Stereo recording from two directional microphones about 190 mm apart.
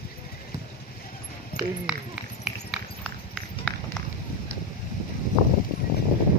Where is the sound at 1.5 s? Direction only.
50° left (ahead or behind).